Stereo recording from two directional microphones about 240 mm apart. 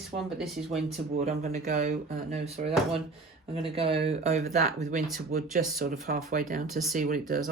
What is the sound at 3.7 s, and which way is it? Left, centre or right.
Speech, right.